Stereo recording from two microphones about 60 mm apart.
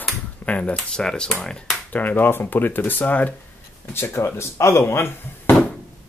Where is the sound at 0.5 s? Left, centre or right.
Left.